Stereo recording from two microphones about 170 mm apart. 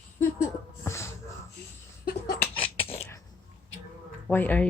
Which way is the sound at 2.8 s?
35° left (ahead or behind).